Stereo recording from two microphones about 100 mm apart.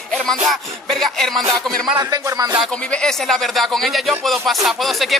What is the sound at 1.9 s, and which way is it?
Speech, 40° right (ahead or behind).